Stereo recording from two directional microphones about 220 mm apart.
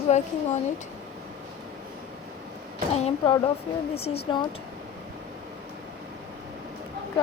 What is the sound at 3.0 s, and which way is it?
Speech, 30° left (ahead or behind).